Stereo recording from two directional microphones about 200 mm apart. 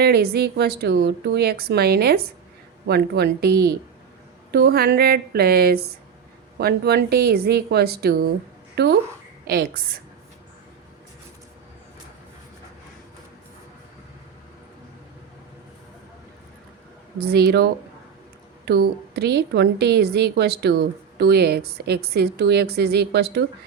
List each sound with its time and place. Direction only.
0.0 s a woman's voice: 55° right (ahead or behind)
17.2 s a woman's voice: 50° right (ahead or behind)